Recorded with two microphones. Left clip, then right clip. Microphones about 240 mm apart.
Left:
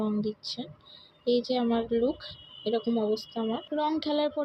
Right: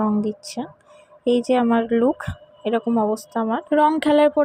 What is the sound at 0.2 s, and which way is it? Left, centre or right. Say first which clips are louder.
Speech: right 7 dB; right.